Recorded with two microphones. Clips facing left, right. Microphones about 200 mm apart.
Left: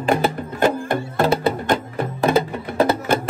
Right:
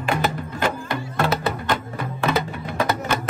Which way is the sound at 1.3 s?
30° left (ahead or behind).